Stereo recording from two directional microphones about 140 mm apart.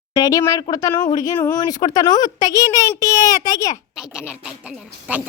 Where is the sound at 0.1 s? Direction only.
25° left (ahead or behind).